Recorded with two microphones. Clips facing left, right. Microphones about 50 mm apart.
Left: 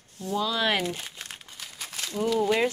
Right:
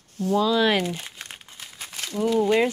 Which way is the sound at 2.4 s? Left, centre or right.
Centre.